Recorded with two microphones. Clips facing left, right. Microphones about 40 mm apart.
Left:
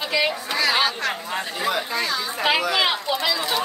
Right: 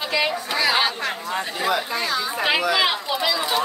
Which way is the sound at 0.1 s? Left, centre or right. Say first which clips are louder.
Even; centre.